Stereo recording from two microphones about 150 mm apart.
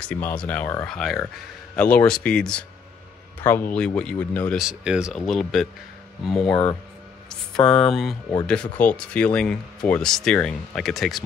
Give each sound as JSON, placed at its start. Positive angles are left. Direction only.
{"t": 0.1, "sound": "speech", "side_deg": 10}
{"t": 0.8, "sound": "speech", "side_deg": 0}
{"t": 4.6, "sound": "speech", "side_deg": -5}
{"t": 6.5, "sound": "speech", "side_deg": 15}